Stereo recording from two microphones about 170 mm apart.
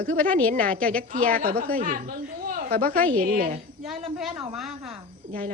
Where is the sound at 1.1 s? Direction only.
60° right (ahead or behind).